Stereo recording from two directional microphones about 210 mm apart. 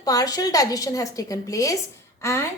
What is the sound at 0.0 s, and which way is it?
A woman's voice, 15° left (ahead or behind).